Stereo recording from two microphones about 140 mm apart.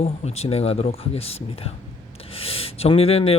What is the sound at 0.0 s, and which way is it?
A man's voice, 50° left (ahead or behind).